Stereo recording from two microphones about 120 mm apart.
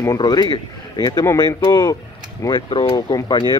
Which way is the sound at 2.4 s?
40° left (ahead or behind).